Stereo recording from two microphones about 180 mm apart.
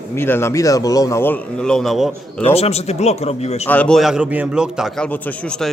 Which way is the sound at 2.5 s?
35° left (ahead or behind).